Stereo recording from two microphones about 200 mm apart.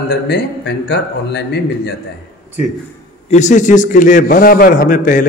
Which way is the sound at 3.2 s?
35° left (ahead or behind).